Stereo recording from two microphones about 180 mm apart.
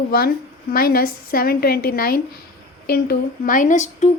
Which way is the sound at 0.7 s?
55° left (ahead or behind).